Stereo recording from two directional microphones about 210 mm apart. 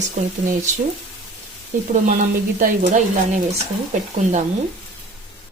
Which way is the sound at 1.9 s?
40° right (ahead or behind).